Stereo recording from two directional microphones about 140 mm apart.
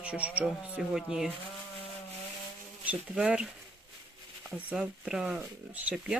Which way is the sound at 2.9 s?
10° right (ahead or behind).